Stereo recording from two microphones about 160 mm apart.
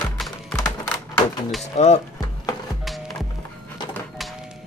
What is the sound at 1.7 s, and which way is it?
Speech, 45° left (ahead or behind).